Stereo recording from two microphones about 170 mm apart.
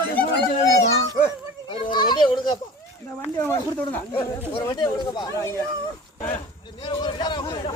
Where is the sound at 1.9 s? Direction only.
25° left (ahead or behind).